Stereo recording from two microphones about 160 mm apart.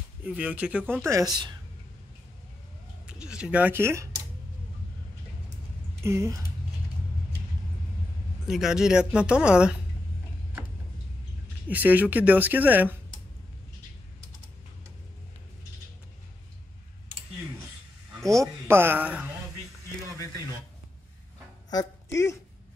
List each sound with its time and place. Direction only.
0.2 s speech: 10° right (ahead or behind)
1.0 s speech: 20° right (ahead or behind)
3.1 s speech: 5° right (ahead or behind)
5.9 s speech: 15° right (ahead or behind)
8.5 s speech: 5° right (ahead or behind)
11.6 s speech: 10° right (ahead or behind)
18.7 s speech: 15° right (ahead or behind)
21.6 s speech: 20° left (ahead or behind)